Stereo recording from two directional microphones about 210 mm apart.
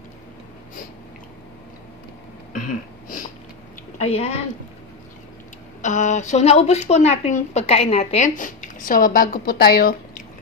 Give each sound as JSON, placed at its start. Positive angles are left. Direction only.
{"t": 4.0, "sound": "a woman's voice", "side_deg": 30}
{"t": 5.8, "sound": "a woman's voice", "side_deg": 35}